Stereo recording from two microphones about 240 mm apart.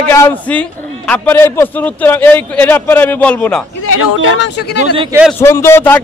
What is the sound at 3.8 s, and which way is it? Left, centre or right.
Speech, left.